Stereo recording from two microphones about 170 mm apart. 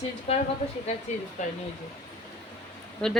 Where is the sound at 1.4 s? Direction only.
45° left (ahead or behind).